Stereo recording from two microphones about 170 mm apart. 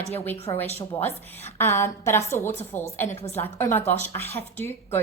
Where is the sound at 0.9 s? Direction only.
10° left (ahead or behind).